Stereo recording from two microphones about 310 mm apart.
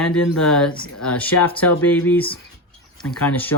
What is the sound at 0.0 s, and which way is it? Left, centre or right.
Speech, centre.